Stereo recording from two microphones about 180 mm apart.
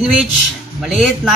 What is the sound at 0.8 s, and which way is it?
Speech, centre (ahead or behind).